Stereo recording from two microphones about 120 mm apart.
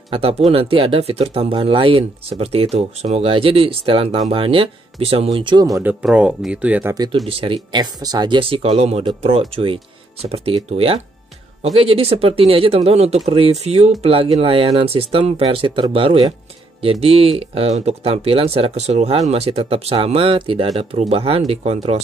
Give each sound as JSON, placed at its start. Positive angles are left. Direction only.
{"t": 0.1, "sound": "speech", "side_deg": -55}
{"t": 6.0, "sound": "speech", "side_deg": -5}
{"t": 7.2, "sound": "speech", "side_deg": -50}